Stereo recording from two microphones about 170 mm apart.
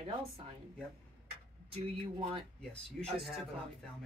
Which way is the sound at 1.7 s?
35° right (ahead or behind).